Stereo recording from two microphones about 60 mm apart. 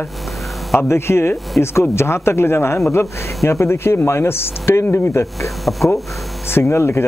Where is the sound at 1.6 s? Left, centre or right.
Left.